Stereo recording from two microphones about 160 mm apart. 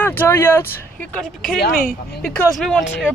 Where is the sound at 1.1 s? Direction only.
5° left (ahead or behind).